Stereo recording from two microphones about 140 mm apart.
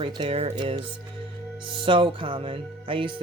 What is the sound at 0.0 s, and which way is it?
Speech, 40° right (ahead or behind).